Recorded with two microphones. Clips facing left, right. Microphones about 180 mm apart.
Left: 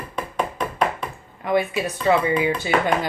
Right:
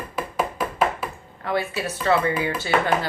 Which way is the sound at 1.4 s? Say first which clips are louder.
Left 4 dB; 15° left (ahead or behind).